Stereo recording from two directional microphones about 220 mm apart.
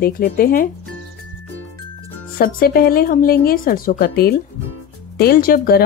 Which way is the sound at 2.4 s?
40° left (ahead or behind).